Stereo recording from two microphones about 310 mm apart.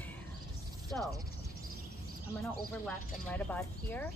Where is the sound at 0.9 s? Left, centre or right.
Centre.